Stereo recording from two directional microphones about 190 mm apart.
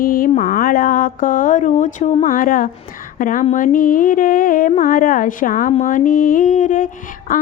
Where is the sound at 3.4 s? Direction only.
40° left (ahead or behind).